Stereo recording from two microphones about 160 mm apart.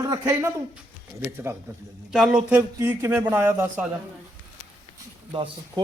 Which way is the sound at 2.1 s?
5° right (ahead or behind).